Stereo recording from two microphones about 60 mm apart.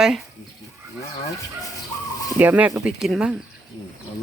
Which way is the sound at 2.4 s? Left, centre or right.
Right.